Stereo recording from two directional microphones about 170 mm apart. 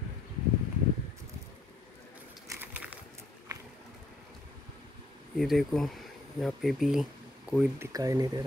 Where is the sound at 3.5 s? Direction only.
20° right (ahead or behind).